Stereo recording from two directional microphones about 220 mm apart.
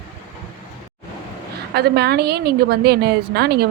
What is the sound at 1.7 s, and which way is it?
A woman's voice, 45° right (ahead or behind).